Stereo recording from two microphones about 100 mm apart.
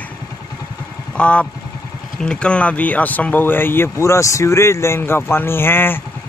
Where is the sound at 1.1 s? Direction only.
10° left (ahead or behind).